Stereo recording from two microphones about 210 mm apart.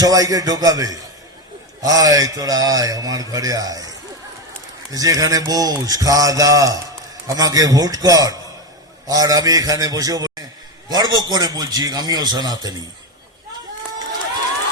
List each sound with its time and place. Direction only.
0.0 s a man's voice: 15° right (ahead or behind)